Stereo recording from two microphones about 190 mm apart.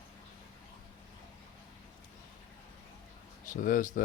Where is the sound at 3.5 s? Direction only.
45° left (ahead or behind).